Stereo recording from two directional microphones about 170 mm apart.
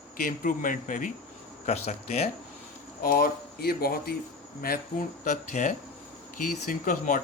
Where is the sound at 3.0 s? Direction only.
60° left (ahead or behind).